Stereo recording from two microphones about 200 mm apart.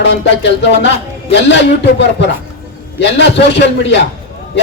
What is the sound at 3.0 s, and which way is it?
Speech, 60° left (ahead or behind).